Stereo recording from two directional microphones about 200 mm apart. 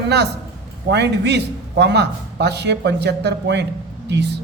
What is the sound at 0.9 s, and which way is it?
A man's voice, 55° right (ahead or behind).